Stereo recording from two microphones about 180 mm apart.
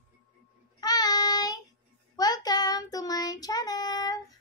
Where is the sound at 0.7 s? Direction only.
20° left (ahead or behind).